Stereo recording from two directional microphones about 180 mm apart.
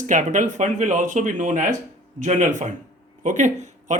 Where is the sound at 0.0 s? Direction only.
45° right (ahead or behind).